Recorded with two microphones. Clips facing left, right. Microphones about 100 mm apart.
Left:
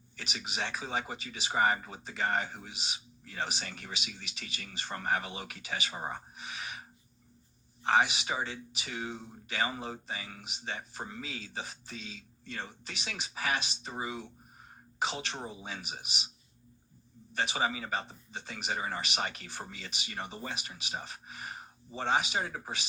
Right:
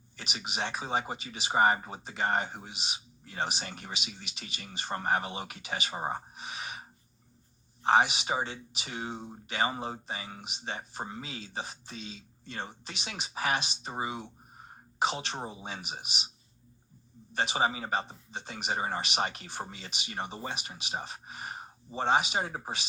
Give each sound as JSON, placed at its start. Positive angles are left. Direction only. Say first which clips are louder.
{"t": 0.2, "sound": "speech", "louder": "right 2 dB", "side_deg": -25}
{"t": 6.3, "sound": "gasp", "louder": "right 2 dB", "side_deg": -25}
{"t": 7.9, "sound": "speech", "louder": "right 3 dB", "side_deg": -25}
{"t": 17.3, "sound": "speech", "louder": "right 3 dB", "side_deg": -25}